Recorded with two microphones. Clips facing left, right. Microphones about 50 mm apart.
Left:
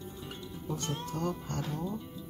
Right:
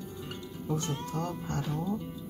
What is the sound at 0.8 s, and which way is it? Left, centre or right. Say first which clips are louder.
Speech: even; right.